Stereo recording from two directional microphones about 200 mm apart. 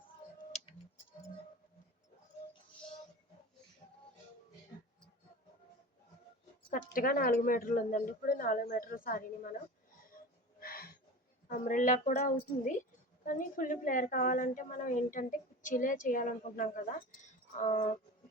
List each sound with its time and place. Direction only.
6.7 s speech: 45° left (ahead or behind)
10.6 s a sound: 50° left (ahead or behind)
11.4 s a woman's voice: 40° left (ahead or behind)